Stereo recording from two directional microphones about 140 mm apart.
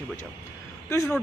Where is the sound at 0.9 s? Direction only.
20° left (ahead or behind).